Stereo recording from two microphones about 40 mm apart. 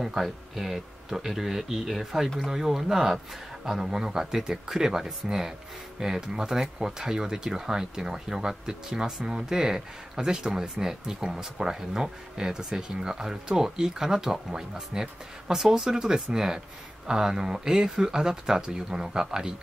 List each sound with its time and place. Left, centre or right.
0.0 s speech: centre